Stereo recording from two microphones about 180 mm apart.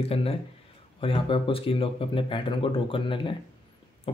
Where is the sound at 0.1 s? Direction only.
30° left (ahead or behind).